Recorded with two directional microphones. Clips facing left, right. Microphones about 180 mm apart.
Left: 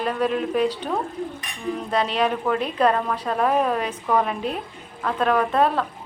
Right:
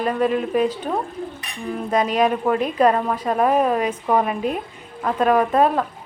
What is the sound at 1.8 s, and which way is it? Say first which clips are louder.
A woman's voice: right 4 dB; 10° right (ahead or behind).